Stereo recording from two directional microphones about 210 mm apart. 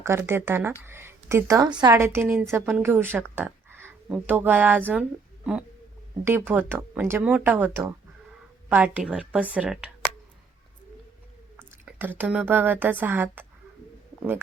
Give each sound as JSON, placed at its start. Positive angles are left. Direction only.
{"t": 0.0, "sound": "speech", "side_deg": -10}
{"t": 11.9, "sound": "speech", "side_deg": -10}